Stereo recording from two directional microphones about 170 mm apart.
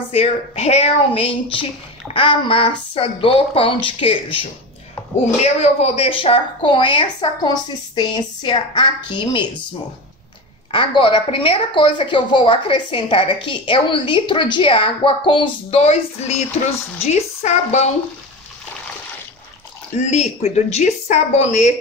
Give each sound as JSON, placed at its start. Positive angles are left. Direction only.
{"t": 0.1, "sound": "a woman's voice", "side_deg": 40}
{"t": 10.7, "sound": "a woman's voice", "side_deg": 30}
{"t": 20.1, "sound": "a woman's voice", "side_deg": 40}